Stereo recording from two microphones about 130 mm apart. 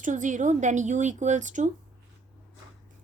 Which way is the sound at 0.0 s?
75° right (ahead or behind).